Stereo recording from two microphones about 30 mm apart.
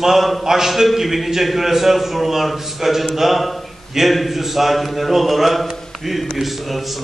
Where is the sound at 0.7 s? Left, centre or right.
Centre.